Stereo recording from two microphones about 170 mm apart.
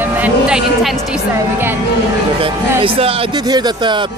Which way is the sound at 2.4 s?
30° right (ahead or behind).